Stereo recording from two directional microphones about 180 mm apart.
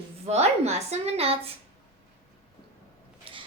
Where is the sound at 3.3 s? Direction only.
30° right (ahead or behind).